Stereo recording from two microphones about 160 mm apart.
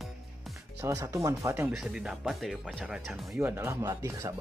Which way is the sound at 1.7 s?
5° right (ahead or behind).